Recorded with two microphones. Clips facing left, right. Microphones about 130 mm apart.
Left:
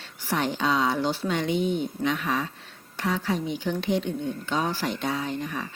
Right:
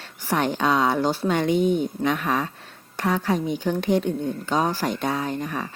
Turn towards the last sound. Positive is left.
turn(degrees=-50)  # may be behind; listen again after turning